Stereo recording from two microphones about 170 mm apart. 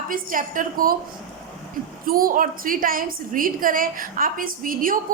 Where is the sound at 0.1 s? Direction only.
55° right (ahead or behind).